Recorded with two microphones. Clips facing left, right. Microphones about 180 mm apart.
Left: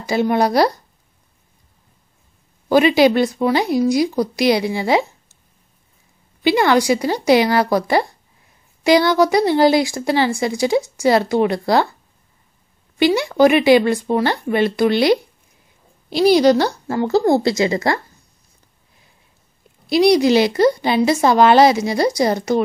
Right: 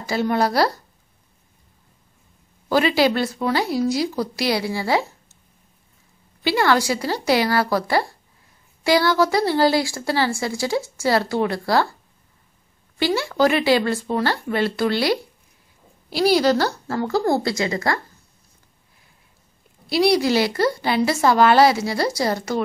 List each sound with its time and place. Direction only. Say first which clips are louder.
0.0 s speech: left 4 dB; 15° left (ahead or behind)
2.7 s speech: left 5 dB; 20° left (ahead or behind)
6.4 s speech: left 4 dB; 20° left (ahead or behind)
12.9 s speech: left 6 dB; 20° left (ahead or behind)
19.9 s speech: left 5 dB; 20° left (ahead or behind)